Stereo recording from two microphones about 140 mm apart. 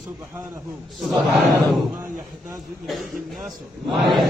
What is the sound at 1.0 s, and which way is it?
Chant, centre (ahead or behind).